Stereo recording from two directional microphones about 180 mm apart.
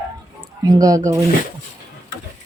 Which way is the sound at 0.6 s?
20° right (ahead or behind).